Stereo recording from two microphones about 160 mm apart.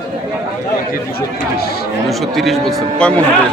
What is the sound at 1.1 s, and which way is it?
Speech, 75° left (ahead or behind).